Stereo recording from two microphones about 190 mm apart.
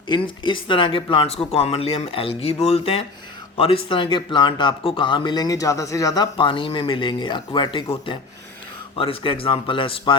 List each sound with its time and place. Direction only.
0.1 s speech: 25° left (ahead or behind)